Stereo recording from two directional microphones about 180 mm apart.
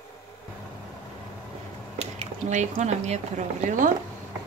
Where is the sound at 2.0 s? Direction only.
40° right (ahead or behind).